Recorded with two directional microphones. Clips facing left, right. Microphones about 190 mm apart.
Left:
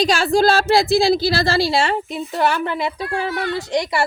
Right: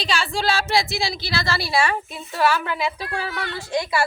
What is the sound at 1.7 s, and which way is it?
A woman's voice, 20° left (ahead or behind).